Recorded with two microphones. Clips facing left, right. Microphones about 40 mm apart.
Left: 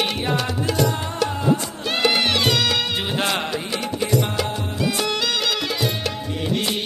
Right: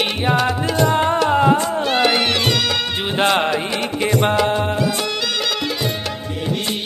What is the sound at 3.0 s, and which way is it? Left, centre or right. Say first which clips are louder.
Music: right 6 dB; right.